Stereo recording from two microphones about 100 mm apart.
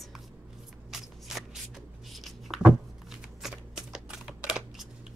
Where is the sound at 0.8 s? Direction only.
5° right (ahead or behind).